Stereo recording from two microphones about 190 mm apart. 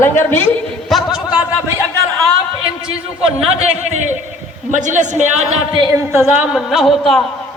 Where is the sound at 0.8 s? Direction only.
Centre (ahead or behind).